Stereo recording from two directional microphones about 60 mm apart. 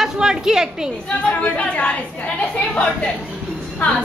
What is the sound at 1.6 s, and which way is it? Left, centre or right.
A woman's voice, centre.